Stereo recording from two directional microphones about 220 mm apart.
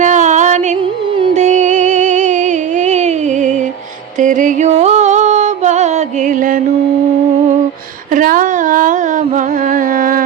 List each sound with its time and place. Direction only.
0.0 s music: 35° right (ahead or behind)
8.1 s music: 40° right (ahead or behind)